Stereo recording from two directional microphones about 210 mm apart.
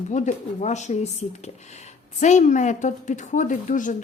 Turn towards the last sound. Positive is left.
turn(degrees=40)  # may be behind; listen again after turning